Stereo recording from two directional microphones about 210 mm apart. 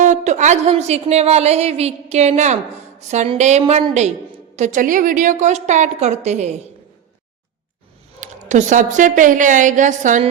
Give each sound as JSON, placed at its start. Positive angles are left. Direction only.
{"t": 0.0, "sound": "a woman's voice", "side_deg": -35}
{"t": 8.2, "sound": "a woman's voice", "side_deg": -35}